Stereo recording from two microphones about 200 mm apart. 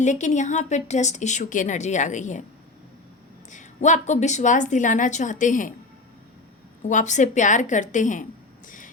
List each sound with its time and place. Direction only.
0.0 s a woman's voice: 35° left (ahead or behind)
3.5 s a woman's voice: 35° left (ahead or behind)
6.8 s a woman's voice: 35° left (ahead or behind)